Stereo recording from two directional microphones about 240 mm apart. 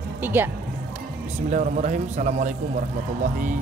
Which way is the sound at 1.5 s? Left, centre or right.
Right.